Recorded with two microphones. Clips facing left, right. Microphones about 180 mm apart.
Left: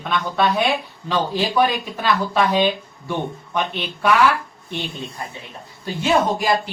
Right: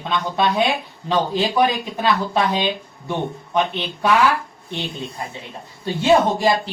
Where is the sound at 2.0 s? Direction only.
20° right (ahead or behind).